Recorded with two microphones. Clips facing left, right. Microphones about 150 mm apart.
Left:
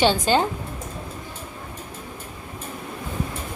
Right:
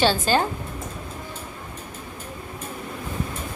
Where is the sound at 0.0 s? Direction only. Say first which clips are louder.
Left 1 dB; 20° left (ahead or behind).